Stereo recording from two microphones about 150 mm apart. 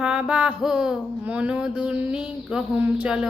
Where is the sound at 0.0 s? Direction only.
5° right (ahead or behind).